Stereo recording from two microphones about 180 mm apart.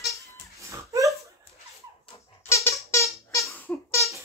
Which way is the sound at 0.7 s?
15° right (ahead or behind).